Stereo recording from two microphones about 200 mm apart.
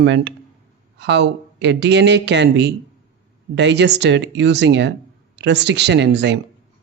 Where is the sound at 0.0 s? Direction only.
60° right (ahead or behind).